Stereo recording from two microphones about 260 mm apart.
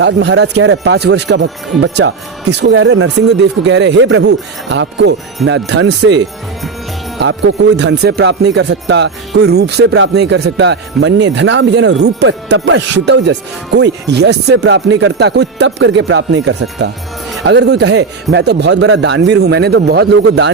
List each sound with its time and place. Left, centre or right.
0.0 s a man's voice: right